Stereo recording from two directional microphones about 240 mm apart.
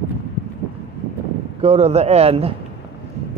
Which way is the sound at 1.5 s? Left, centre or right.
Right.